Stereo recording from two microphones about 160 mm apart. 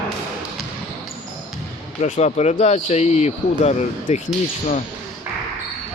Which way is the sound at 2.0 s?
45° left (ahead or behind).